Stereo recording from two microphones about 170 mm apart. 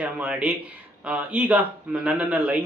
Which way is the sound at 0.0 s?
10° right (ahead or behind).